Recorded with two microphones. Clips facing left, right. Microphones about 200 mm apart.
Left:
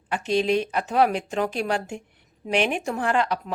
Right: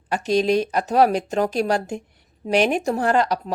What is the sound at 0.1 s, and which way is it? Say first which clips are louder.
A woman's voice: right 3 dB; 40° right (ahead or behind).